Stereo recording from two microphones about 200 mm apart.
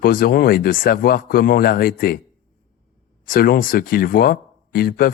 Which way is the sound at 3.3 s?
50° left (ahead or behind).